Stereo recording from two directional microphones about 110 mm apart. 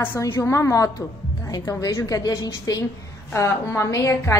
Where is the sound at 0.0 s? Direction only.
25° left (ahead or behind).